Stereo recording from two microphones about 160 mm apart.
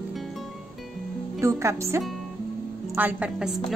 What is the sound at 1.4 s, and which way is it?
A woman's voice, 20° right (ahead or behind).